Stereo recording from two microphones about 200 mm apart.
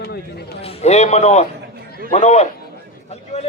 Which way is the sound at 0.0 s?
50° left (ahead or behind).